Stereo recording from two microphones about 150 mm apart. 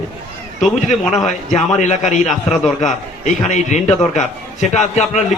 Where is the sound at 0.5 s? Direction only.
55° left (ahead or behind).